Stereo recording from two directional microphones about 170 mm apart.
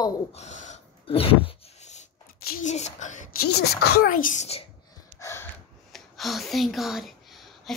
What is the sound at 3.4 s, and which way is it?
A woman's voice, 70° left (ahead or behind).